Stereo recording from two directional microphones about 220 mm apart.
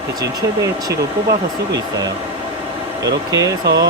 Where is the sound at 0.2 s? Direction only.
15° right (ahead or behind).